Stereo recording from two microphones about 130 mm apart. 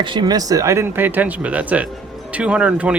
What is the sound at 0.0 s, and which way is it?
Speech, 35° right (ahead or behind).